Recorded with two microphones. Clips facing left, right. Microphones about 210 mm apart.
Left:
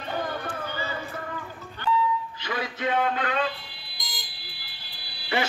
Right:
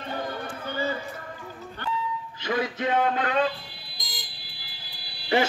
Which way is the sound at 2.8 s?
40° right (ahead or behind).